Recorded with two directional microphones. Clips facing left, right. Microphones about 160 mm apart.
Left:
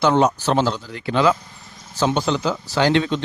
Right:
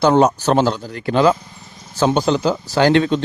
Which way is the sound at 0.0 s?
40° right (ahead or behind).